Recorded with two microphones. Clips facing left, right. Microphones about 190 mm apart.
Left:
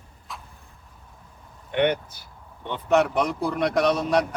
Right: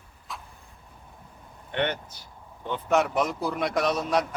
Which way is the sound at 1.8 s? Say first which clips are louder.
Left 6 dB; 10° left (ahead or behind).